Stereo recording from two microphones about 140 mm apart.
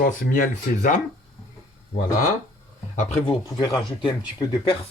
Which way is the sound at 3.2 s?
30° left (ahead or behind).